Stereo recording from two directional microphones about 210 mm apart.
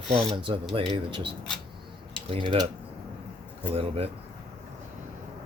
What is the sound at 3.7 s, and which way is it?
Speech, 25° right (ahead or behind).